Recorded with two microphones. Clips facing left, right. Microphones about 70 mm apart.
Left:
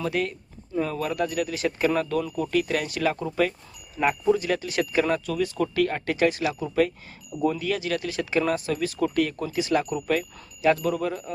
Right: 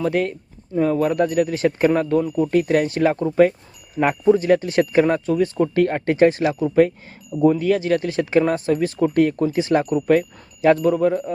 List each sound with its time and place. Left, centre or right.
0.0 s speech: right